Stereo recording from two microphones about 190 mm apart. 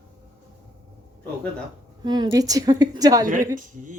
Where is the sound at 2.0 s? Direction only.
25° right (ahead or behind).